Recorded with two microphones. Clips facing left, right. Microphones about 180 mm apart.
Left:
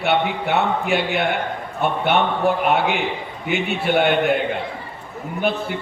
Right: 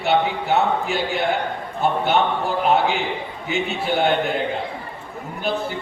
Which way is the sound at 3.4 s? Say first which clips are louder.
Left 2 dB; 60° left (ahead or behind).